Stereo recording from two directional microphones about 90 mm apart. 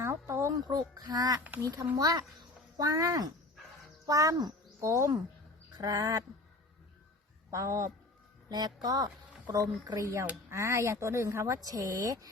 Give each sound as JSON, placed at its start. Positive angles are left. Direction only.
{"t": 0.0, "sound": "music", "side_deg": -30}
{"t": 0.7, "sound": "a woman's voice", "side_deg": -50}
{"t": 5.7, "sound": "speech", "side_deg": -45}
{"t": 7.5, "sound": "a woman's voice", "side_deg": -35}
{"t": 8.4, "sound": "a woman's voice", "side_deg": -50}